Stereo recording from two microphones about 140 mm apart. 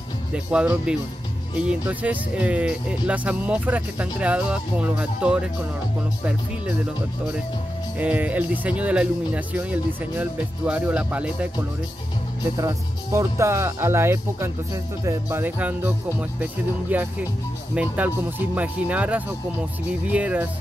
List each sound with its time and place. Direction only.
0.3 s speech: 10° right (ahead or behind)
8.0 s speech: 10° right (ahead or behind)
12.5 s speech: 20° right (ahead or behind)